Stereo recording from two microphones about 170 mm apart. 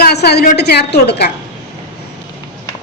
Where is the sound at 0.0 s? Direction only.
70° left (ahead or behind).